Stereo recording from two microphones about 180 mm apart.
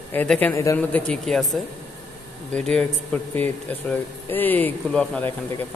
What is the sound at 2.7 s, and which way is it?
A man's voice, 5° left (ahead or behind).